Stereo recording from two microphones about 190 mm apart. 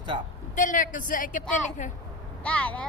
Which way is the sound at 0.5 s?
45° left (ahead or behind).